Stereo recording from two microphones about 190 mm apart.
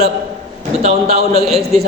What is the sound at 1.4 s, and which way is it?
Speech, centre (ahead or behind).